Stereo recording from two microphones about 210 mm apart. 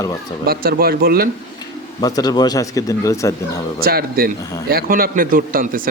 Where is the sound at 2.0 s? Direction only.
20° left (ahead or behind).